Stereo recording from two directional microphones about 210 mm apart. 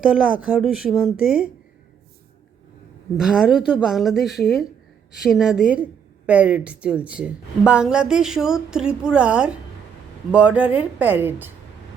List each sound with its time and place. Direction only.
0.0 s a woman's voice: 5° right (ahead or behind)
3.2 s a woman's voice: centre (ahead or behind)